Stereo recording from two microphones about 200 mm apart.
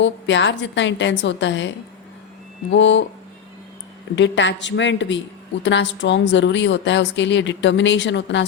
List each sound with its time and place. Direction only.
0.0 s a woman's voice: 65° left (ahead or behind)
2.7 s a woman's voice: 65° left (ahead or behind)
4.1 s a woman's voice: 65° left (ahead or behind)